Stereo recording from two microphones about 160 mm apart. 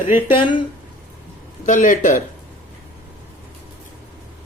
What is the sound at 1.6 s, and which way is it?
Speech, 55° left (ahead or behind).